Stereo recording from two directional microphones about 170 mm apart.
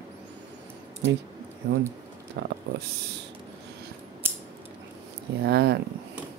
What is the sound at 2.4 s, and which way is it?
Speech, 90° right.